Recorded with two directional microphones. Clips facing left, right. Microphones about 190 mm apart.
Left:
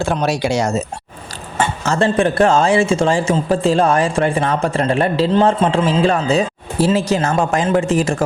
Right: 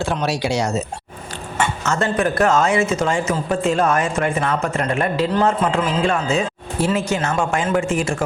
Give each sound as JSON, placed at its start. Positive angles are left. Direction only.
{"t": 0.0, "sound": "speech", "side_deg": 45}
{"t": 1.5, "sound": "a man's voice", "side_deg": 35}